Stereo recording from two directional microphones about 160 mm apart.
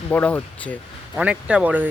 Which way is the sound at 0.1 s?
10° left (ahead or behind).